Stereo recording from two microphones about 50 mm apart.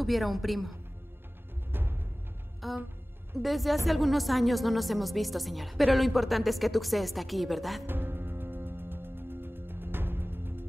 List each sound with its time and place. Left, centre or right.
0.0 s a woman's voice: centre
1.7 s music: right
2.6 s music: centre
3.3 s a woman's voice: centre
7.8 s music: right